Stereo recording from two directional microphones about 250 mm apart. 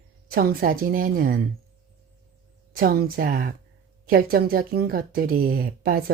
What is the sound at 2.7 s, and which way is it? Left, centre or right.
Speech, right.